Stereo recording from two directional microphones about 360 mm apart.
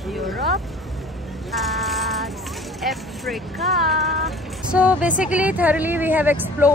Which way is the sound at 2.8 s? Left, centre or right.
Centre.